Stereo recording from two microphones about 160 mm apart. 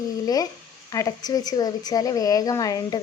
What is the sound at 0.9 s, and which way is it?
A woman's voice, 25° left (ahead or behind).